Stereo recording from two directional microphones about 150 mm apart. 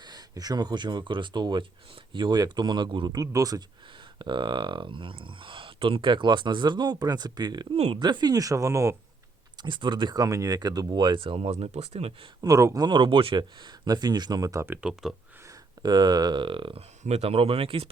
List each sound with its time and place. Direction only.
0.0 s speech: 25° right (ahead or behind)
7.8 s speech: 45° right (ahead or behind)
8.0 s speech: 30° right (ahead or behind)
9.6 s speech: 30° right (ahead or behind)
12.4 s speech: 20° right (ahead or behind); by 15.1 s 5° right (ahead or behind)
15.4 s speech: 30° right (ahead or behind)